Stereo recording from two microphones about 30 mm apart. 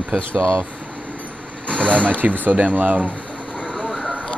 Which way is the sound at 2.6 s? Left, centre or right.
Right.